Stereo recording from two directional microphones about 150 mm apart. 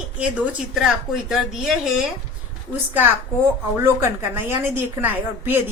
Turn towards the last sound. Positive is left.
turn(degrees=-15)  # may be behind; listen again after turning